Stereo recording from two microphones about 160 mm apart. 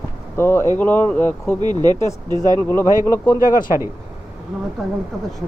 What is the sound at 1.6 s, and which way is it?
Speech, 25° right (ahead or behind).